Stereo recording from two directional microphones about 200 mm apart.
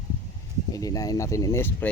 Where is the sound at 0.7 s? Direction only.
15° left (ahead or behind).